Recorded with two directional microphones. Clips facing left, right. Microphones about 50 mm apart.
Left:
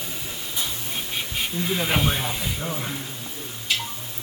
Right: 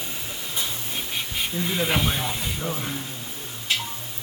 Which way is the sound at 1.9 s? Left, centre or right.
Centre.